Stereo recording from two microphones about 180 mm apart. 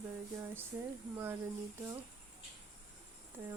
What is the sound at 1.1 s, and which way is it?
Speech, 10° right (ahead or behind).